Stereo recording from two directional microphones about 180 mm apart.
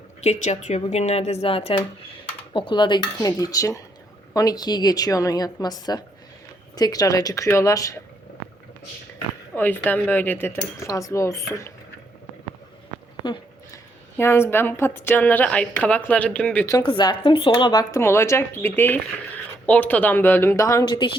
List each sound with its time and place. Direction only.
0.2 s speech: 40° left (ahead or behind); by 8.0 s 20° left (ahead or behind)
9.6 s a woman's voice: 10° left (ahead or behind)
13.2 s a sound: 25° left (ahead or behind)
14.2 s a woman's voice: 15° left (ahead or behind)
16.6 s a woman's voice: 25° left (ahead or behind)